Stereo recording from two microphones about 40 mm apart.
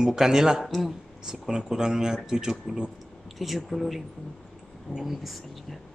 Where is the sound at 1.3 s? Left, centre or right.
Centre.